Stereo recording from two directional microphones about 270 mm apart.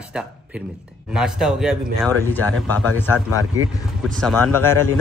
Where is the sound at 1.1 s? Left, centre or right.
Centre.